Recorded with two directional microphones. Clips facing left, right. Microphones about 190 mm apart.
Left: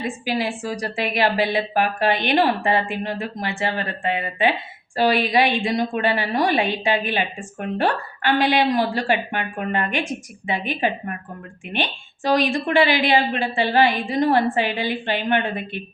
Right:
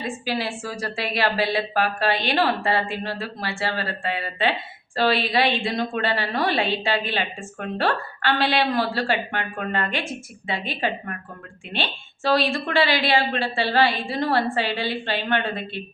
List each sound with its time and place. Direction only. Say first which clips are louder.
0.3 s a woman's voice: left 4 dB; 15° left (ahead or behind)